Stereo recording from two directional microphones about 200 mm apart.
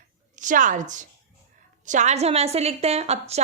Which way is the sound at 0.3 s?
40° right (ahead or behind).